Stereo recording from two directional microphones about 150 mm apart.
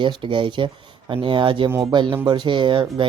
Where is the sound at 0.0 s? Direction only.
35° right (ahead or behind).